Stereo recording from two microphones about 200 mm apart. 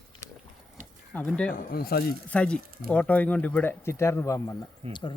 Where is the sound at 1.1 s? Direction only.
5° left (ahead or behind).